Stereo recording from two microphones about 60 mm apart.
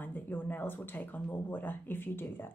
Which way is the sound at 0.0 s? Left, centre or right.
Left.